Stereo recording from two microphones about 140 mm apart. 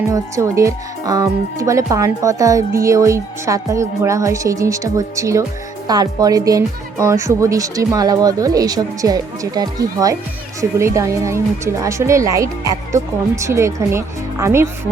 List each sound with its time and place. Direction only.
0.1 s speech: 20° right (ahead or behind)